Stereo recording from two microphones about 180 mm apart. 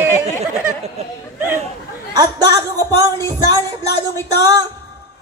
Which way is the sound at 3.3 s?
20° right (ahead or behind).